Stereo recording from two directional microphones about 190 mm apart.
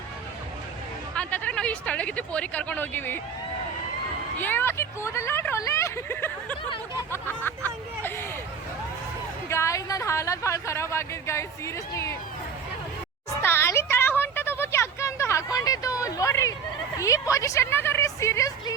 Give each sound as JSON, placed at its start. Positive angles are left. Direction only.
{"t": 1.1, "sound": "speech", "side_deg": 5}
{"t": 4.4, "sound": "speech", "side_deg": 10}
{"t": 9.5, "sound": "speech", "side_deg": 15}
{"t": 13.4, "sound": "a sound", "side_deg": 10}